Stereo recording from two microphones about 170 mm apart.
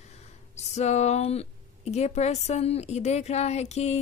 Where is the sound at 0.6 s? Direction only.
40° left (ahead or behind).